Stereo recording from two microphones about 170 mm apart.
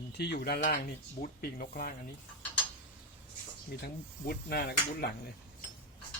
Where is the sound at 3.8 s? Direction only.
70° left (ahead or behind).